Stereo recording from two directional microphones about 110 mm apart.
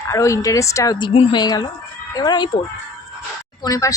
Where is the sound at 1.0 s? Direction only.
55° left (ahead or behind).